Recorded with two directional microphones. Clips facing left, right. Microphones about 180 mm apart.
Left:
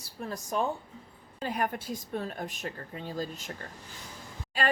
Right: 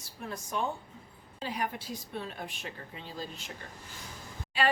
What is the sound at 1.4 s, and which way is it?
Speech, 50° left (ahead or behind).